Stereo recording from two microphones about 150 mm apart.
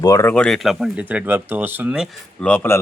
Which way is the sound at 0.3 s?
5° left (ahead or behind).